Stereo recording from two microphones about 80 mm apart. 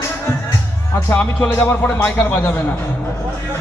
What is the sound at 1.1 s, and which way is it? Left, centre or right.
Speech, centre.